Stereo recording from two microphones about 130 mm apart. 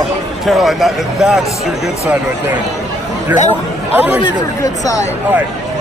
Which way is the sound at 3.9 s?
15° right (ahead or behind).